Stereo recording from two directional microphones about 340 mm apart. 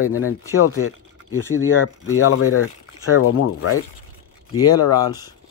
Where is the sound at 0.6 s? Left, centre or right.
Left.